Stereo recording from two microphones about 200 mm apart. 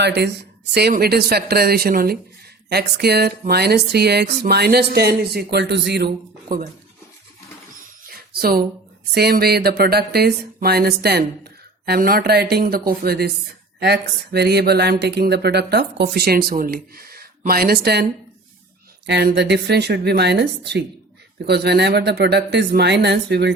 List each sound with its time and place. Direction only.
0.0 s a woman's voice: 55° right (ahead or behind)
8.3 s speech: 50° right (ahead or behind)
19.0 s a woman's voice: 55° right (ahead or behind)